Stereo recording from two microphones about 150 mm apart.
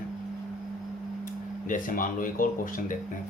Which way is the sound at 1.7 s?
65° left (ahead or behind).